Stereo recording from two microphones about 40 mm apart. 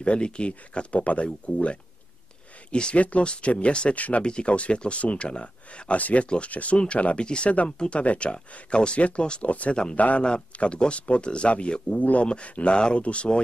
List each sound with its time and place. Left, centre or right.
0.0 s speech: left
3.0 s speech: left
4.2 s speech: left
6.2 s speech: left
10.2 s speech: left
12.0 s speech: left